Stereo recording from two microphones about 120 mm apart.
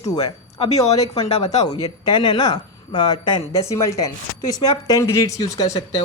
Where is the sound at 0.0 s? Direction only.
35° left (ahead or behind).